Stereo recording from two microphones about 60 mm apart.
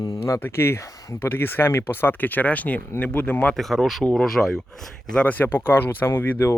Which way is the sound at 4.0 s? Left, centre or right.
Centre.